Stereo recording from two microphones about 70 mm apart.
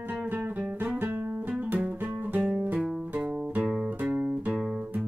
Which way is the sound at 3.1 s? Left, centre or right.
Centre.